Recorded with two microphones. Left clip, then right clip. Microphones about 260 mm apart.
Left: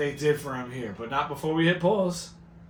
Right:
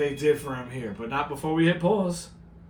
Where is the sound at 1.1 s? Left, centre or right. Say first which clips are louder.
Even; centre.